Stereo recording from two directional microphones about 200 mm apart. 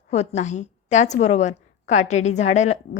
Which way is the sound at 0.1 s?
35° left (ahead or behind).